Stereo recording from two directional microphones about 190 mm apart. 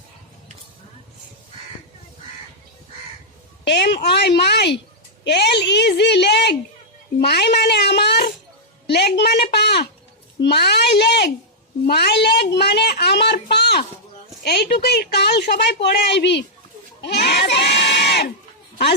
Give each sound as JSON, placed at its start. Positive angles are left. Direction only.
{"t": 3.6, "sound": "a child's voice", "side_deg": 60}
{"t": 17.0, "sound": "goat", "side_deg": 60}